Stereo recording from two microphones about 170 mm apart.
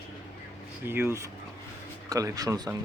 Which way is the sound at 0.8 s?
15° right (ahead or behind).